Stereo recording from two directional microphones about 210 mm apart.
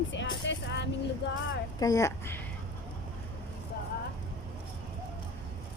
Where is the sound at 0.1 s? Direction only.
60° left (ahead or behind).